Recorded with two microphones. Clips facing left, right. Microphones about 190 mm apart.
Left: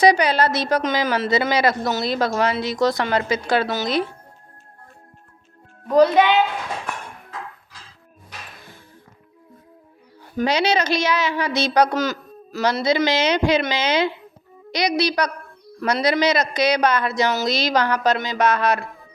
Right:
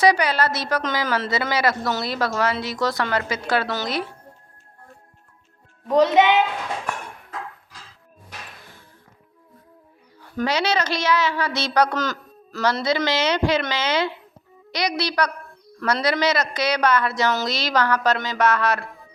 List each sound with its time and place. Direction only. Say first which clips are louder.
0.0 s a woman's voice: left 3 dB; 20° left (ahead or behind)
6.0 s a child's voice: left 2 dB; 20° right (ahead or behind)
10.3 s a woman's voice: left 3 dB; 15° left (ahead or behind)